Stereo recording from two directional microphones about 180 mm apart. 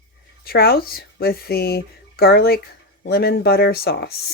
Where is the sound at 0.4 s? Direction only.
60° left (ahead or behind).